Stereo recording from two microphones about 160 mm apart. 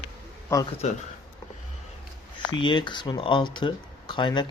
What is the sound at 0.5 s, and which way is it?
Speech, 15° left (ahead or behind).